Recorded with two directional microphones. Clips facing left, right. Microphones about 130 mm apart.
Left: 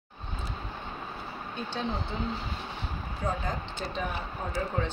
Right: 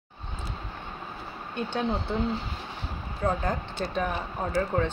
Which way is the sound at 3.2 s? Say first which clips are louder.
Right 5 dB; 55° right (ahead or behind).